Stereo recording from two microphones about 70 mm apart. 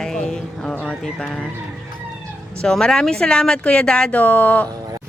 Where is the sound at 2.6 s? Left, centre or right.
Centre.